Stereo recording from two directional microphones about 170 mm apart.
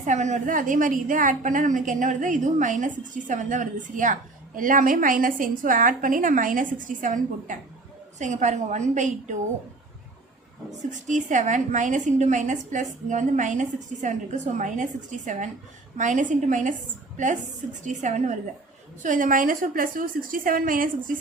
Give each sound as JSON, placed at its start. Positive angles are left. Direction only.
{"t": 0.0, "sound": "a woman's voice", "side_deg": -45}
{"t": 10.7, "sound": "a woman's voice", "side_deg": -45}
{"t": 17.8, "sound": "a woman's voice", "side_deg": -45}